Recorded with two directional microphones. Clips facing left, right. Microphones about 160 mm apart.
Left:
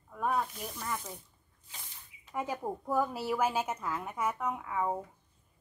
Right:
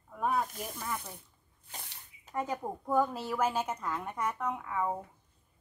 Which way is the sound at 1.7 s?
60° right (ahead or behind).